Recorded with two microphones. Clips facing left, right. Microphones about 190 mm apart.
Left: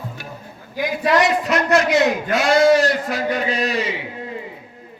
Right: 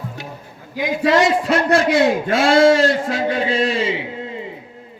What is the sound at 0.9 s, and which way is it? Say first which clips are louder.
A man's voice: right 2 dB; 25° right (ahead or behind).